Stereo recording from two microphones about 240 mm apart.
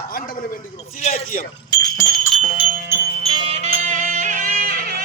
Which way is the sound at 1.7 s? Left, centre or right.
Centre.